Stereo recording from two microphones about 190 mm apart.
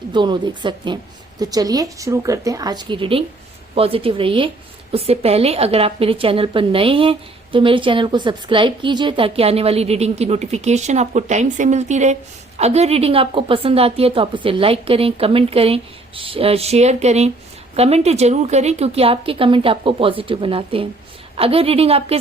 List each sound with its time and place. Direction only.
0.1 s a woman's voice: 25° right (ahead or behind)